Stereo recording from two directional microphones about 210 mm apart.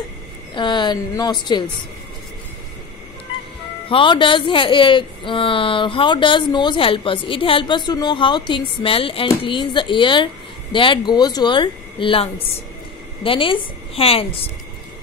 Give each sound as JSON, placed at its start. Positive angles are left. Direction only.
{"t": 0.6, "sound": "speech", "side_deg": 20}
{"t": 3.9, "sound": "speech", "side_deg": 25}